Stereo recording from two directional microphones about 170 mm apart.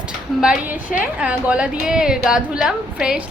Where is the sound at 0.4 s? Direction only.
5° right (ahead or behind).